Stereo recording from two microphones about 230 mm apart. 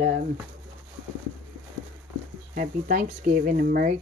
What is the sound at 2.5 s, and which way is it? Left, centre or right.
Speech, right.